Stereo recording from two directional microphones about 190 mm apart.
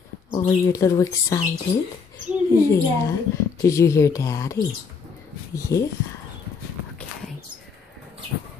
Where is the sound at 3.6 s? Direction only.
15° left (ahead or behind).